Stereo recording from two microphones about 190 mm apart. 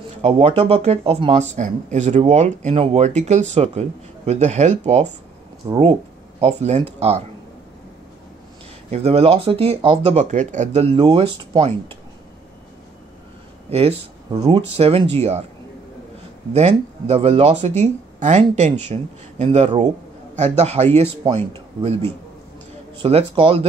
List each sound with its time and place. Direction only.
0.2 s speech: 30° right (ahead or behind)
5.6 s speech: 20° right (ahead or behind)
6.4 s speech: 35° right (ahead or behind)
8.9 s speech: 35° right (ahead or behind)
13.7 s speech: 30° right (ahead or behind)
16.5 s speech: 35° right (ahead or behind)